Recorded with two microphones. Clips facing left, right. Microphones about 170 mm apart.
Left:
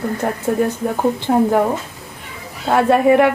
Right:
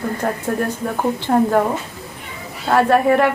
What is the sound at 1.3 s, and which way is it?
Speech, 5° left (ahead or behind).